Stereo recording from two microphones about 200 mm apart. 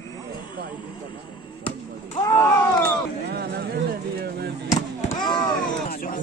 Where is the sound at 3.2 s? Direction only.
50° right (ahead or behind).